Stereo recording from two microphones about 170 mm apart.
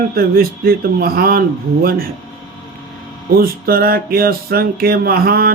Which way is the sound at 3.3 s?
60° right (ahead or behind).